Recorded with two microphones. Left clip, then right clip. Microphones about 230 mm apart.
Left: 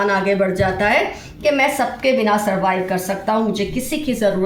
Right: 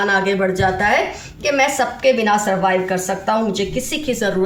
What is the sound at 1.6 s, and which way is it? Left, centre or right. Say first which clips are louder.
Speech: right 1 dB; right.